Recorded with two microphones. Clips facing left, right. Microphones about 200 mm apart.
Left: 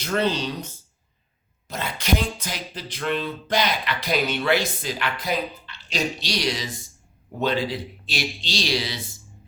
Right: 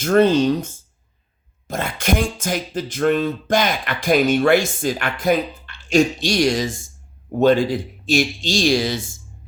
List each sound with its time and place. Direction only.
0.0 s speech: 50° right (ahead or behind)